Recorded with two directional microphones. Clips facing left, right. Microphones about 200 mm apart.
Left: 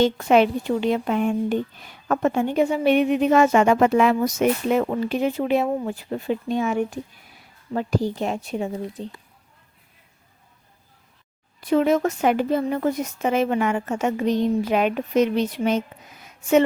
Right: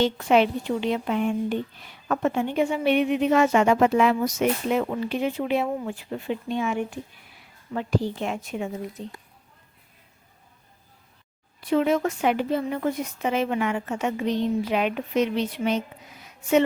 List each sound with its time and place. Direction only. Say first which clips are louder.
0.0 s a woman's voice: left 3 dB; 45° left (ahead or behind)
11.6 s speech: left 3 dB; 45° left (ahead or behind)